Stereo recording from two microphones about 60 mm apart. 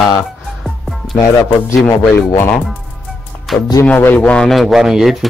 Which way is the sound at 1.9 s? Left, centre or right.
Left.